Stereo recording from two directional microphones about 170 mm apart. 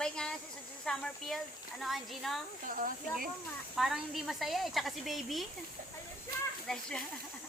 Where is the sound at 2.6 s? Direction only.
55° right (ahead or behind).